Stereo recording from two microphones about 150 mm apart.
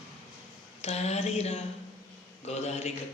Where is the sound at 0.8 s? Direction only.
45° left (ahead or behind).